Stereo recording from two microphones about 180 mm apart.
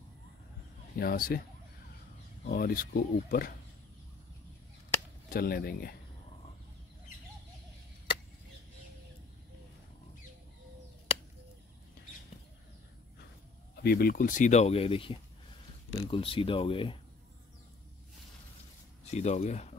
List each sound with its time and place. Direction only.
0.9 s speech: 55° left (ahead or behind)
2.4 s speech: 55° left (ahead or behind)
5.3 s speech: 60° left (ahead or behind)
13.8 s speech: 60° left (ahead or behind); by 17.0 s 30° left (ahead or behind)
19.0 s speech: 40° left (ahead or behind)